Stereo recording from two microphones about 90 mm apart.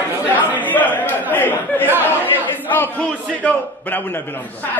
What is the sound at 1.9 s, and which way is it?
Chatter, 20° right (ahead or behind).